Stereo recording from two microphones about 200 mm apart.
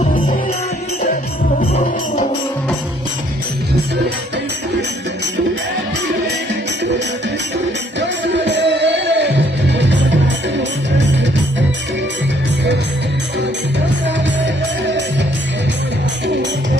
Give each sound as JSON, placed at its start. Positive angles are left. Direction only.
{"t": 7.9, "sound": "music", "side_deg": -60}
{"t": 14.4, "sound": "music", "side_deg": -60}
{"t": 16.2, "sound": "music", "side_deg": -60}